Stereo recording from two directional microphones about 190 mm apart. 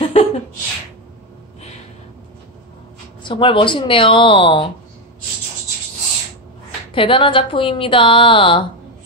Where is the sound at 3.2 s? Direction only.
25° left (ahead or behind).